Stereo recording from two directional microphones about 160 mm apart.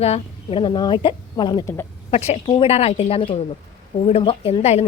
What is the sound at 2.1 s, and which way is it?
A woman's voice, 40° left (ahead or behind).